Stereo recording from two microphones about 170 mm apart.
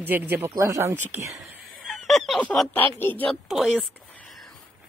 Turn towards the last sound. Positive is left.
turn(degrees=0)  # may be behind; listen again after turning